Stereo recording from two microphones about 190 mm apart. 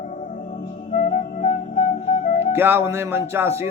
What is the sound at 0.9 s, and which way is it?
Flute, 40° left (ahead or behind).